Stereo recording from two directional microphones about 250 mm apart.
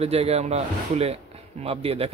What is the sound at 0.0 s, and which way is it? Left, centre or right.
A man's voice, right.